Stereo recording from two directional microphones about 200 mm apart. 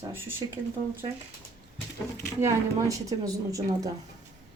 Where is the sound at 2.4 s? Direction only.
15° right (ahead or behind).